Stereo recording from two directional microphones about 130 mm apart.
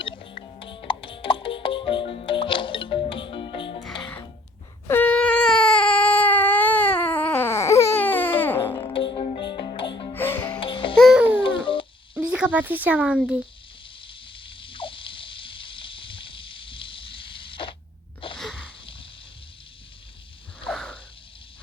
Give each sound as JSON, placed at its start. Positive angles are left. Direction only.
{"t": 0.0, "sound": "music", "side_deg": 40}
{"t": 4.9, "sound": "baby cry", "side_deg": 15}
{"t": 8.9, "sound": "music", "side_deg": 45}
{"t": 10.1, "sound": "music", "side_deg": 15}
{"t": 10.6, "sound": "music", "side_deg": 40}
{"t": 10.9, "sound": "music", "side_deg": 0}
{"t": 11.2, "sound": "music", "side_deg": -10}
{"t": 11.4, "sound": "a sound", "side_deg": 40}
{"t": 12.1, "sound": "speech", "side_deg": -10}
{"t": 14.0, "sound": "a sound", "side_deg": 40}
{"t": 18.3, "sound": "sneeze", "side_deg": 0}
{"t": 20.7, "sound": "a sound", "side_deg": 5}